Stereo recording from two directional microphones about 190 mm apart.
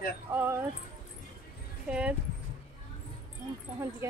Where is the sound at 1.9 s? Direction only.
5° right (ahead or behind).